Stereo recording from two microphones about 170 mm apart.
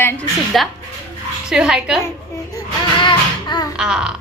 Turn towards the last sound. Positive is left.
turn(degrees=-5)  # may be behind; listen again after turning